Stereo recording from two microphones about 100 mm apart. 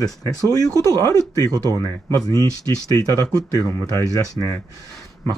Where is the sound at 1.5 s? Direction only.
35° right (ahead or behind).